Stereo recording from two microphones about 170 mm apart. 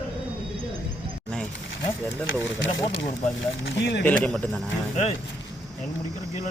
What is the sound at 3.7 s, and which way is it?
Speech, 85° left.